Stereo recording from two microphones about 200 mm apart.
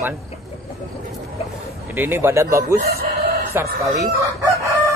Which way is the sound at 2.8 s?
50° right (ahead or behind).